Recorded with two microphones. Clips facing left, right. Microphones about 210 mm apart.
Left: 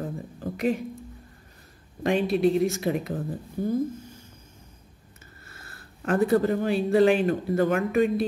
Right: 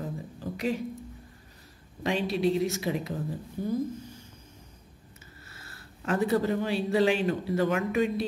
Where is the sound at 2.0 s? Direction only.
50° left (ahead or behind).